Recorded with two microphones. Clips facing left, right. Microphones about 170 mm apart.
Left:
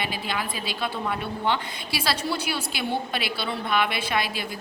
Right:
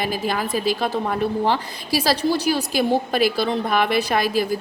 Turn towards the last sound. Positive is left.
turn(degrees=-45)  # may be behind; listen again after turning